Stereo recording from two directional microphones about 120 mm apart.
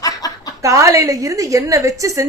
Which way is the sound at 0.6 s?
25° right (ahead or behind).